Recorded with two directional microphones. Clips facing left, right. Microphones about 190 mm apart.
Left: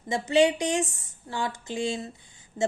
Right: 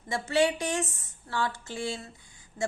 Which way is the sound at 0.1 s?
15° left (ahead or behind).